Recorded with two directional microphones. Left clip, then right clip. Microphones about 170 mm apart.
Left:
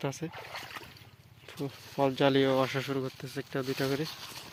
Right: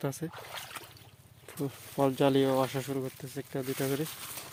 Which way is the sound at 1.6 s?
30° right (ahead or behind).